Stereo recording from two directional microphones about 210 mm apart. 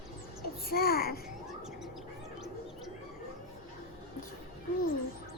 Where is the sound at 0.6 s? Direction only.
45° left (ahead or behind).